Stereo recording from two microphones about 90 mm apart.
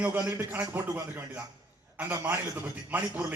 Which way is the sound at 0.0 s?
20° right (ahead or behind).